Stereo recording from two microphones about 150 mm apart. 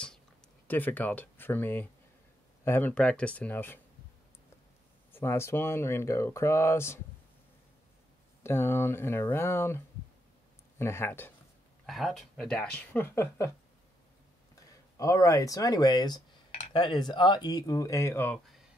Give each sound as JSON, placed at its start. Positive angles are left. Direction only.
{"t": 0.7, "sound": "speech", "side_deg": 10}
{"t": 5.1, "sound": "speech", "side_deg": 15}
{"t": 8.4, "sound": "speech", "side_deg": 15}
{"t": 11.8, "sound": "speech", "side_deg": 0}
{"t": 15.0, "sound": "speech", "side_deg": 20}